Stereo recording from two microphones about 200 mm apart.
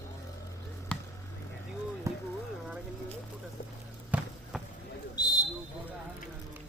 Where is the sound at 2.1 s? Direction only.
15° right (ahead or behind).